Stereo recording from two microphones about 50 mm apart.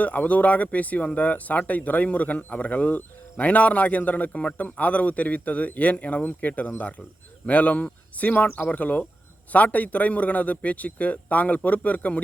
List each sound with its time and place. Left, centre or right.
0.0 s speech: left